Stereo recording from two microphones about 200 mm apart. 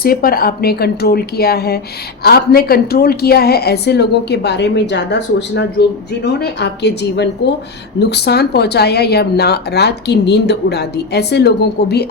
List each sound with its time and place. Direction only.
0.0 s a woman's voice: 50° left (ahead or behind)